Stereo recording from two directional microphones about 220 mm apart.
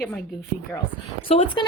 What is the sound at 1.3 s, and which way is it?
Speech, 25° left (ahead or behind).